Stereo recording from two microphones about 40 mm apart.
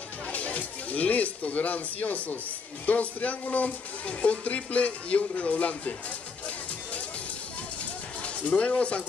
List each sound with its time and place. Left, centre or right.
0.3 s speech: left
8.2 s speech: left